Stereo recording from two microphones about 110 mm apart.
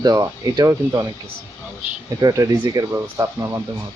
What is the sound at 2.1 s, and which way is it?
Speech, 30° right (ahead or behind).